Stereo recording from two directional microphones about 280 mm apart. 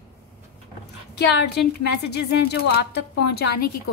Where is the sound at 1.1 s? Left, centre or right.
Left.